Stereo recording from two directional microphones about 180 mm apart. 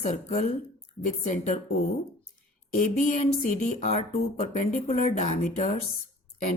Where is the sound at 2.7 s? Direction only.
45° left (ahead or behind).